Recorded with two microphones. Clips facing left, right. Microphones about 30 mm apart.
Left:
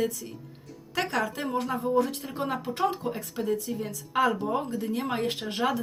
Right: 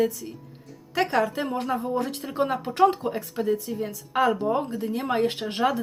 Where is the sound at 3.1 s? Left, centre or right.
Centre.